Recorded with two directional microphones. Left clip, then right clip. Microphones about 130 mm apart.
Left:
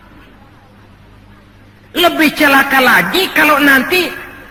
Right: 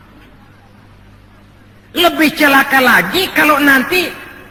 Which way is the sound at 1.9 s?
40° left (ahead or behind).